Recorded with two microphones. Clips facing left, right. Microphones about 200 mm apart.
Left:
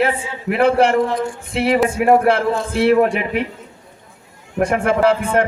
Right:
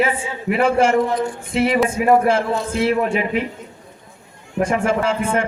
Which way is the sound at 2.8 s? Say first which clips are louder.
Left 5 dB; 60° left (ahead or behind).